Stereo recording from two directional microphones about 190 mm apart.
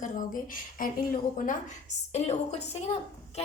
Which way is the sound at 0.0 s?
45° left (ahead or behind).